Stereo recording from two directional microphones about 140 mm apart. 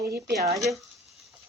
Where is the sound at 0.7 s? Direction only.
90° right.